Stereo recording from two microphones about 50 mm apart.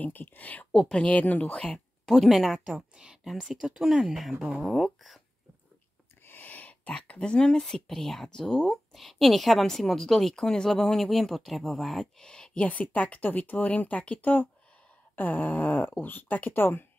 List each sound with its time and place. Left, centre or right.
0.0 s speech: left
0.7 s speech: centre
0.9 s speech: left
2.0 s a woman's voice: centre
2.6 s a woman's voice: centre
3.3 s a woman's voice: centre
6.2 s a woman's voice: left; by 12.1 s centre
12.2 s speech: centre
12.5 s speech: left